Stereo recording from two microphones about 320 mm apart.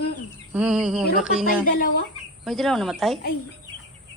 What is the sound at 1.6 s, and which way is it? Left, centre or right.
Speech, left.